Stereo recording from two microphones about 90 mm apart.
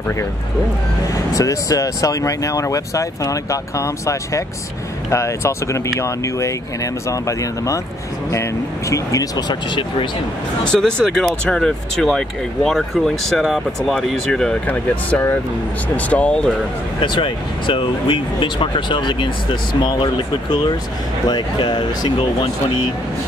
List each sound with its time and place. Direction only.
1.1 s speech: 40° left (ahead or behind)
9.5 s speech: 65° left (ahead or behind)
10.6 s speech: 10° left (ahead or behind)
14.7 s speech: 20° left (ahead or behind)
17.0 s speech: 65° left (ahead or behind)
21.3 s speech: 60° left (ahead or behind)